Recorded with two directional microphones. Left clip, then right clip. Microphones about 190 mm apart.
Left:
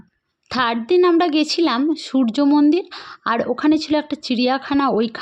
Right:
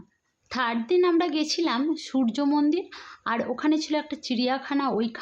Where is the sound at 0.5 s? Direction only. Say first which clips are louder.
Left 7 dB; 45° left (ahead or behind).